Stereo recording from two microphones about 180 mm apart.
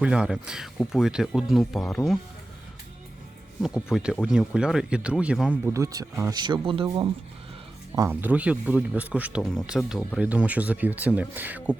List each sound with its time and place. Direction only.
0.0 s speech: 5° right (ahead or behind)
3.9 s speech: centre (ahead or behind)
5.7 s speech: 20° right (ahead or behind)
7.9 s speech: 15° right (ahead or behind)